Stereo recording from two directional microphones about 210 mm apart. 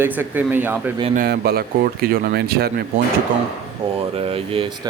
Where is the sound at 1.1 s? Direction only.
45° right (ahead or behind).